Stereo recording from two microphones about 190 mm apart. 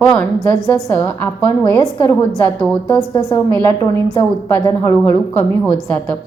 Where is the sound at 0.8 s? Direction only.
10° left (ahead or behind).